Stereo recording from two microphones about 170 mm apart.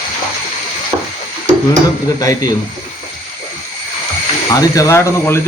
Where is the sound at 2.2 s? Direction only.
20° left (ahead or behind).